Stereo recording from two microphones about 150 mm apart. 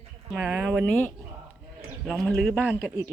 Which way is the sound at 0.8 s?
10° left (ahead or behind).